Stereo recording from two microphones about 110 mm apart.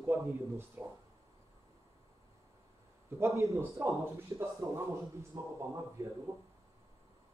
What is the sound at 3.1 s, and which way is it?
Speech, 25° right (ahead or behind).